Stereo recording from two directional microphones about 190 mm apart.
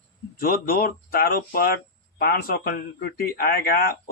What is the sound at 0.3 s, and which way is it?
Speech, 50° left (ahead or behind).